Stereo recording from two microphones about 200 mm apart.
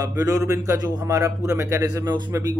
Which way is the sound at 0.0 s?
15° right (ahead or behind).